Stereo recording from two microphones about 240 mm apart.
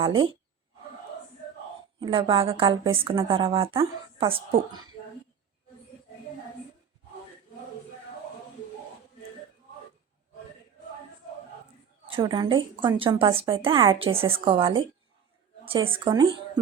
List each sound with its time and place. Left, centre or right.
0.0 s a woman's voice: centre
2.0 s a woman's voice: right
12.0 s a woman's voice: right
15.9 s speech: centre